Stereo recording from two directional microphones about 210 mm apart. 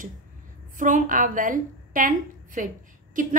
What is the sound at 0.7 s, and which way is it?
A woman's voice, 40° right (ahead or behind).